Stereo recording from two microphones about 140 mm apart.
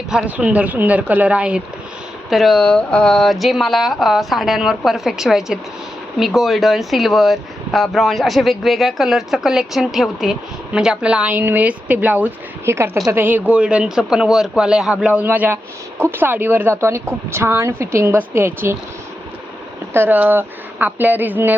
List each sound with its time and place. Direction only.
0.1 s speech: 5° right (ahead or behind)
19.9 s speech: 15° right (ahead or behind)